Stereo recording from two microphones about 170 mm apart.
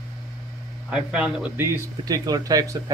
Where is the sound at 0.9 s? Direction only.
5° right (ahead or behind).